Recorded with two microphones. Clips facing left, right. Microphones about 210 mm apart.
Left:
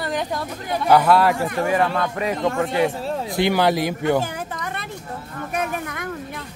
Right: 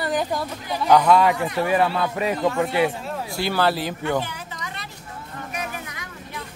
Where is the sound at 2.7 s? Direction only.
25° left (ahead or behind).